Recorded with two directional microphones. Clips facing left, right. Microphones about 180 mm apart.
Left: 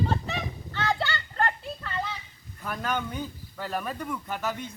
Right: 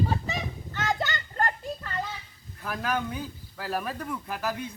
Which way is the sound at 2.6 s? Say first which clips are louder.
Right 1 dB; centre (ahead or behind).